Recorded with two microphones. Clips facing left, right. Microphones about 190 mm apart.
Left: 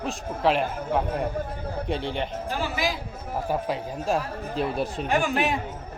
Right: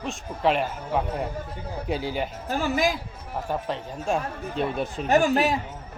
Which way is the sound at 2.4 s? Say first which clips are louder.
Right 7 dB; 45° right (ahead or behind).